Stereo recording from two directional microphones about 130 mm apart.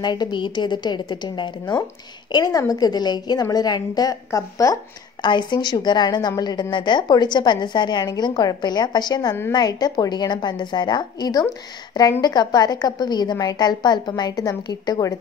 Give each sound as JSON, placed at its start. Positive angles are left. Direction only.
{"t": 0.0, "sound": "a woman's voice", "side_deg": 35}